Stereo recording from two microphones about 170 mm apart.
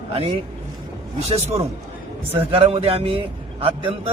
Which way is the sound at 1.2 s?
40° right (ahead or behind).